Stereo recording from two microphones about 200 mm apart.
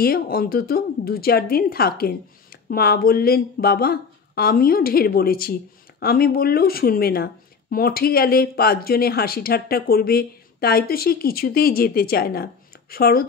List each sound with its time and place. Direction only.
0.0 s a woman's voice: 50° left (ahead or behind)